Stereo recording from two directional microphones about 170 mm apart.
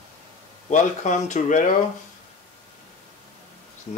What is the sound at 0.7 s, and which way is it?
Speech, 45° left (ahead or behind).